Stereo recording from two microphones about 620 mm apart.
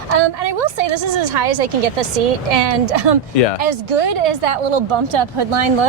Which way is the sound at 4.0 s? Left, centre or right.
Right.